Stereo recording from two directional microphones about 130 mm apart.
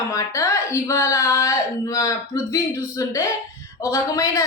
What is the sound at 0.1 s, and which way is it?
A woman's voice, 25° left (ahead or behind).